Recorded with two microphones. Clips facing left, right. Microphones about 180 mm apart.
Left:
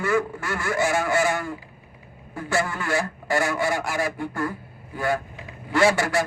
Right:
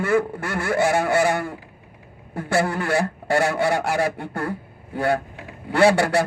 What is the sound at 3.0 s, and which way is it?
Speech, 60° right (ahead or behind).